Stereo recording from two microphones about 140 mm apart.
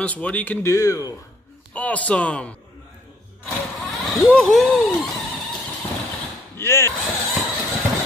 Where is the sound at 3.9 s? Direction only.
Centre (ahead or behind).